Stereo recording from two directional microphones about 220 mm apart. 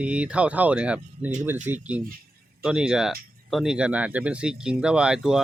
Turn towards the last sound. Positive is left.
turn(degrees=-5)  # may be behind; listen again after turning